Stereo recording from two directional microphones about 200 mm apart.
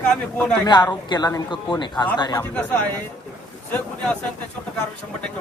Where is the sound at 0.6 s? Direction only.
20° left (ahead or behind).